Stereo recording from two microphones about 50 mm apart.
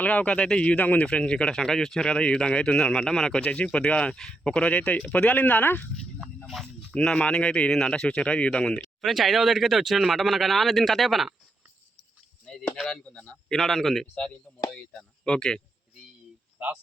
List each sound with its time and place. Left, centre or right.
0.0 s speech: left
6.5 s speech: centre
6.9 s speech: left
9.0 s speech: centre
13.0 s speech: centre
14.7 s speech: centre